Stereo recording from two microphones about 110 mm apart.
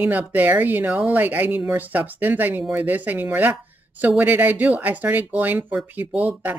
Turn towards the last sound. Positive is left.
turn(degrees=-15)  # may be behind; listen again after turning